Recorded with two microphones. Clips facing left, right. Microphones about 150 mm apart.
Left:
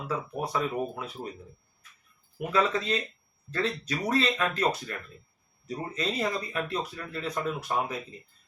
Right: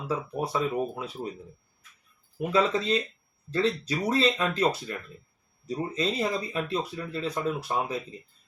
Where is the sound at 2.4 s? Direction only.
25° right (ahead or behind).